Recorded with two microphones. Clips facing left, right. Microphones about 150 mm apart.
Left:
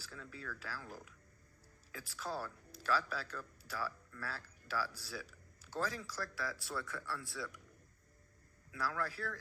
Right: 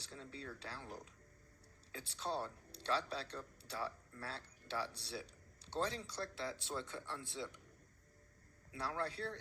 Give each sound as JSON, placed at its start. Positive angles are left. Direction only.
{"t": 0.0, "sound": "speech", "side_deg": -30}
{"t": 8.7, "sound": "speech", "side_deg": -30}